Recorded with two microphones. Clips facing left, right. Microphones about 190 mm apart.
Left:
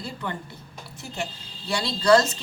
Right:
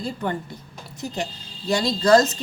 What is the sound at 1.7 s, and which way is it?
Speech, 45° right (ahead or behind).